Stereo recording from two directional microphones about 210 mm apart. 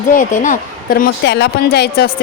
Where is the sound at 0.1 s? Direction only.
40° left (ahead or behind).